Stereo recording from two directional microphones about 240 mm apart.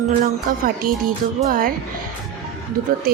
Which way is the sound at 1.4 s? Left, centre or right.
Right.